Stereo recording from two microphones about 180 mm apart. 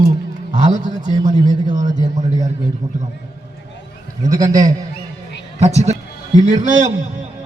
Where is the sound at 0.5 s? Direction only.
40° right (ahead or behind).